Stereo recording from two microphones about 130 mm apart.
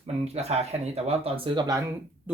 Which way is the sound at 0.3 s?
55° right (ahead or behind).